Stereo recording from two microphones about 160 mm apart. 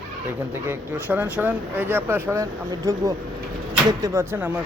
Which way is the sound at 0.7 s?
10° right (ahead or behind).